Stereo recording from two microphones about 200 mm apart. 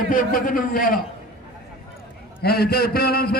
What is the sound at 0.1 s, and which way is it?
Speech, 45° left (ahead or behind).